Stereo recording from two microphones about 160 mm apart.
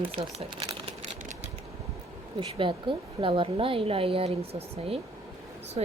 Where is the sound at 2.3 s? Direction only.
30° right (ahead or behind).